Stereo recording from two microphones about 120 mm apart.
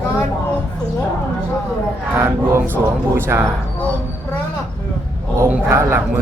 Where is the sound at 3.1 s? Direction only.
20° right (ahead or behind).